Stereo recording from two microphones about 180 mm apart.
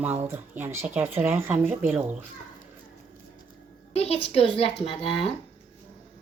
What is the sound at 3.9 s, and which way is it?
A child's voice, 35° left (ahead or behind).